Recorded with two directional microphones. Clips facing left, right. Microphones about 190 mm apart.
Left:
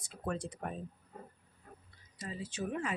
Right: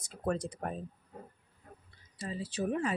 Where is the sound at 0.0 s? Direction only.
40° right (ahead or behind).